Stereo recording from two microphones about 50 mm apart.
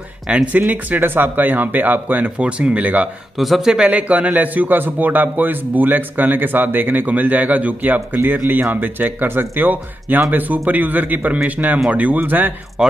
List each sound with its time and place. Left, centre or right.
0.5 s a man's voice: right
3.3 s speech: centre
3.6 s speech: centre
3.9 s a man's voice: right